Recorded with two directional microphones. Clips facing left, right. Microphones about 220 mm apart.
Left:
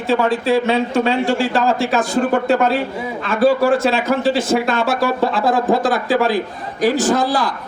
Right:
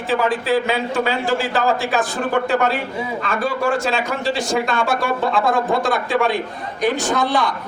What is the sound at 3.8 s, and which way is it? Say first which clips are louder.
Speech: left 5 dB; centre (ahead or behind).